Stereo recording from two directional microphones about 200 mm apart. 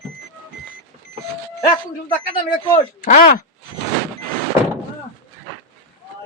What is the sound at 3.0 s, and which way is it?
Speech, 45° left (ahead or behind).